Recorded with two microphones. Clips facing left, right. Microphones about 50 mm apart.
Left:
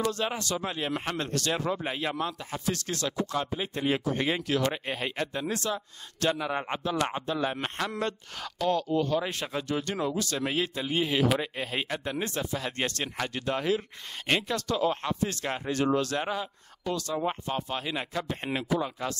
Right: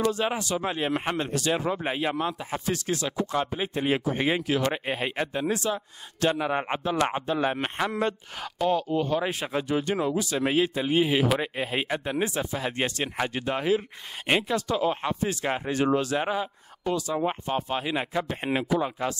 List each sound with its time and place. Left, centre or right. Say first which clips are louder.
0.0 s a man's voice: right 4 dB; centre